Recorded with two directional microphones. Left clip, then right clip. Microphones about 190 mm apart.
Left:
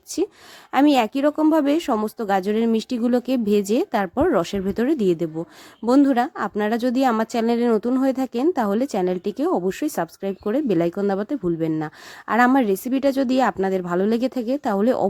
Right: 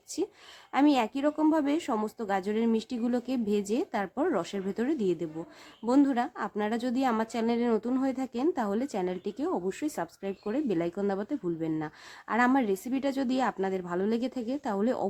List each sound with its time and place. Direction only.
0.1 s a woman's voice: 35° left (ahead or behind)